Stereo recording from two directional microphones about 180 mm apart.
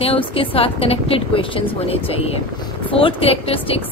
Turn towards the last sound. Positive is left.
turn(degrees=30)  # may be behind; listen again after turning